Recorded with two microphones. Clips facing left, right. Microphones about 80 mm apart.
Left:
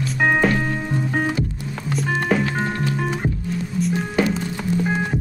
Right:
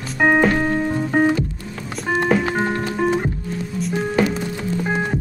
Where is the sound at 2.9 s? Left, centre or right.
Centre.